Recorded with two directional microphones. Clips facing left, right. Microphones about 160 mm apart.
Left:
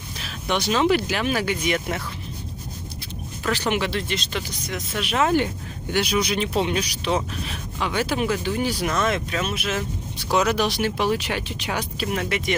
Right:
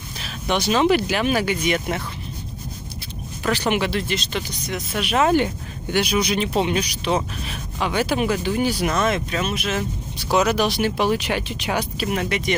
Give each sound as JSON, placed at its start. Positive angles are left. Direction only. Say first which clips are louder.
{"t": 0.2, "sound": "a sound", "louder": "right 2 dB", "side_deg": -5}
{"t": 0.7, "sound": "speech", "louder": "right 2 dB", "side_deg": -15}
{"t": 1.5, "sound": "speech", "louder": "right 2 dB", "side_deg": 0}
{"t": 3.4, "sound": "speech", "louder": "right 2 dB", "side_deg": -15}
{"t": 4.9, "sound": "speech", "louder": "right 3 dB", "side_deg": -15}
{"t": 6.1, "sound": "speech", "louder": "right 1 dB", "side_deg": 0}
{"t": 7.8, "sound": "speech", "louder": "right 3 dB", "side_deg": -10}
{"t": 8.6, "sound": "speech", "louder": "right 2 dB", "side_deg": -5}
{"t": 12.0, "sound": "speech", "louder": "right 2 dB", "side_deg": -5}